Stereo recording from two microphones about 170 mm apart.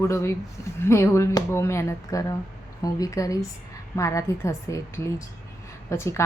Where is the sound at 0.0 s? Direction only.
15° left (ahead or behind).